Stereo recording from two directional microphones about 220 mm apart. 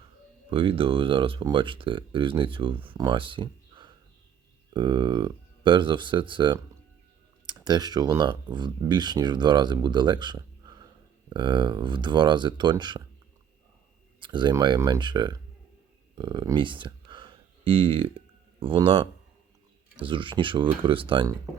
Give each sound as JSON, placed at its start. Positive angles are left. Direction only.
{"t": 0.5, "sound": "speech", "side_deg": -25}
{"t": 14.2, "sound": "speech", "side_deg": -20}